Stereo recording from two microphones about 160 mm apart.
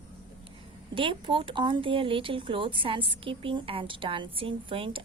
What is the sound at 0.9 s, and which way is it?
Speech, 30° right (ahead or behind).